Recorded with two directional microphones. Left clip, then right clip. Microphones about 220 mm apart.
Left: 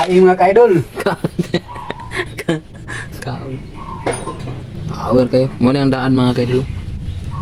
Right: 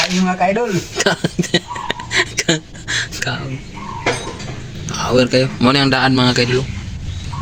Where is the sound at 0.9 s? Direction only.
Centre (ahead or behind).